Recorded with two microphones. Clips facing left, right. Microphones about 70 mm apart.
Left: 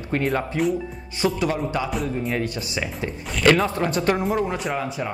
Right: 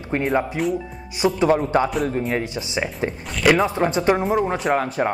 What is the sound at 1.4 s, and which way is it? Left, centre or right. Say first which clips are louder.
Speech: right 6 dB; right.